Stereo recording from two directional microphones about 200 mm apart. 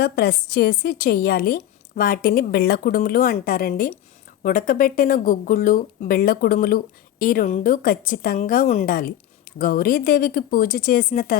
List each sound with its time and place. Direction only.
0.0 s speech: 50° left (ahead or behind)